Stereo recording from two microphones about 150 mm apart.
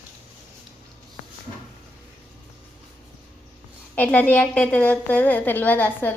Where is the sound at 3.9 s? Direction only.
10° left (ahead or behind).